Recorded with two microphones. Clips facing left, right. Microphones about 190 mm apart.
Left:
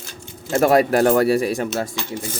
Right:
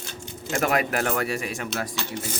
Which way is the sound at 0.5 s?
35° left (ahead or behind).